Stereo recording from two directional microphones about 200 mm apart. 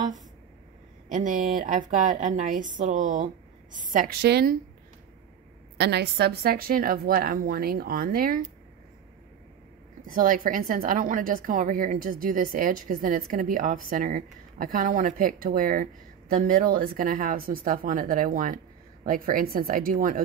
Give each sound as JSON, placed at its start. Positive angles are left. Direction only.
{"t": 1.0, "sound": "a woman's voice", "side_deg": -40}
{"t": 5.8, "sound": "a woman's voice", "side_deg": -55}
{"t": 10.0, "sound": "a woman's voice", "side_deg": -45}